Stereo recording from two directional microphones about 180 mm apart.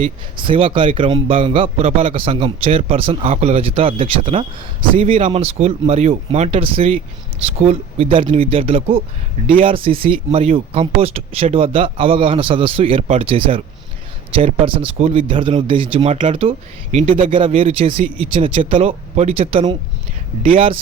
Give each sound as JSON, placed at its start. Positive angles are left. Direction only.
{"t": 0.0, "sound": "a man's voice", "side_deg": -30}